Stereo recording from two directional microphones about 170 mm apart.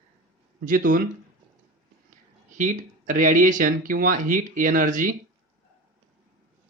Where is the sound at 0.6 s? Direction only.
55° right (ahead or behind).